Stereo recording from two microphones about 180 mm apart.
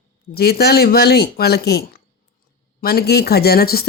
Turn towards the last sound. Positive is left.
turn(degrees=60)  # may be behind; listen again after turning